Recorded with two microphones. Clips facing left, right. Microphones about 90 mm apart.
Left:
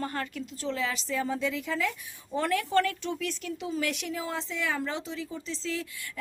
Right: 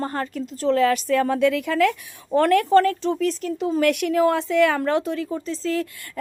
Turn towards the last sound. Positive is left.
turn(degrees=-50)  # may be behind; listen again after turning